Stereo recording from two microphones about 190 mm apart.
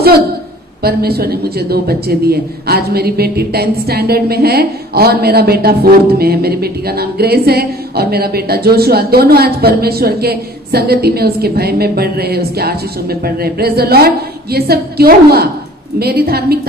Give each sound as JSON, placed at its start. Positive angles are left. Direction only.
{"t": 0.8, "sound": "a woman's voice", "side_deg": -55}